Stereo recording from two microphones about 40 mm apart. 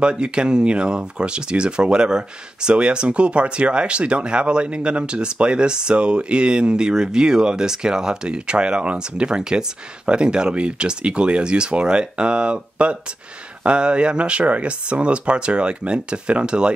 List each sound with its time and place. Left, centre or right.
0.0 s speech: right